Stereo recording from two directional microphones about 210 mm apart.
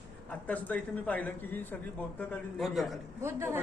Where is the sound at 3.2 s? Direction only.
10° right (ahead or behind).